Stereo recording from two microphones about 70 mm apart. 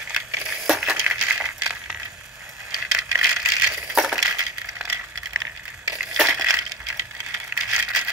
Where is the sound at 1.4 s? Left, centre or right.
Centre.